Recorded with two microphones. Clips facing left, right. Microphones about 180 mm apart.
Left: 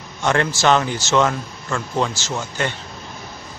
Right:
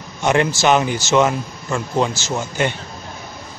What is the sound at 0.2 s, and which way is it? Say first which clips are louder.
A man's voice: right 2 dB; 15° right (ahead or behind).